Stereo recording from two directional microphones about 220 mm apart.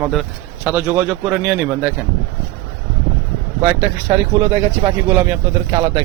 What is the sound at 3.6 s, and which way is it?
A man's voice, 10° right (ahead or behind).